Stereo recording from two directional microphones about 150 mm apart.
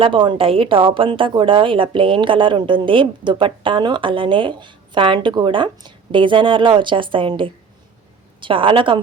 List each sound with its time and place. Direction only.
0.0 s speech: 35° right (ahead or behind)